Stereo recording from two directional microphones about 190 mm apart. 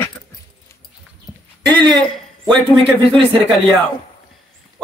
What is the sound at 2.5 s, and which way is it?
Speech, centre (ahead or behind).